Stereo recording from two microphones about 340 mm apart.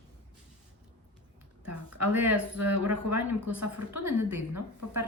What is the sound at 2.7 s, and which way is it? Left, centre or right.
Speech, right.